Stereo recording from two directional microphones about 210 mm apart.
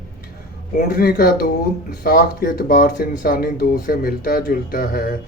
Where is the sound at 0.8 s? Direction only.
45° left (ahead or behind).